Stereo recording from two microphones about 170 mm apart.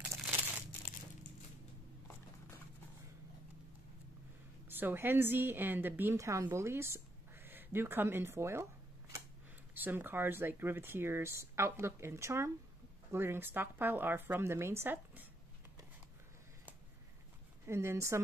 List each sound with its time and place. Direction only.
4.6 s a woman's voice: 10° right (ahead or behind)
9.8 s speech: 10° right (ahead or behind)
17.6 s speech: 15° right (ahead or behind)